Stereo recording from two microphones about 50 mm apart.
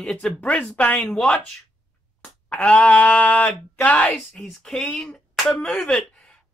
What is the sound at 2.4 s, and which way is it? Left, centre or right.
Speech, left.